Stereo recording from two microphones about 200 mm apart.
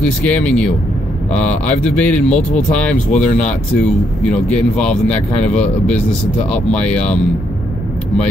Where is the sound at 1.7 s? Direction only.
5° left (ahead or behind).